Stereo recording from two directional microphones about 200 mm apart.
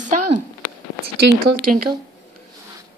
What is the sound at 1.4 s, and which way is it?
Speech, 50° right (ahead or behind).